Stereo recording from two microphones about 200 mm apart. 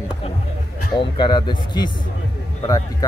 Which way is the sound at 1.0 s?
25° left (ahead or behind).